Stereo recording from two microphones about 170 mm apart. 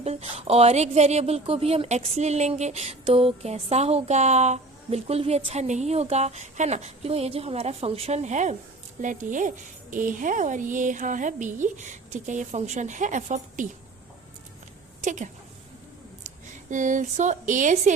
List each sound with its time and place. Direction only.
0.0 s a woman's voice: 40° right (ahead or behind)
15.0 s a woman's voice: 45° right (ahead or behind)